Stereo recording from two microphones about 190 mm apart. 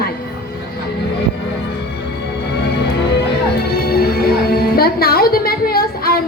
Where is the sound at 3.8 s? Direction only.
55° left (ahead or behind).